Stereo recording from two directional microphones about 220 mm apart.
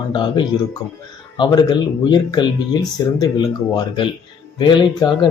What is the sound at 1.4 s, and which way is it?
Speech, 20° left (ahead or behind).